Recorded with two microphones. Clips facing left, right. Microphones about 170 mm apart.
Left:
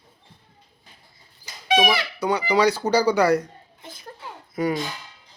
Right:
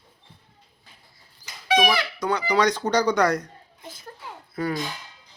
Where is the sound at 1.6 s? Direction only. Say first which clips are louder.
Left 1 dB; 20° left (ahead or behind).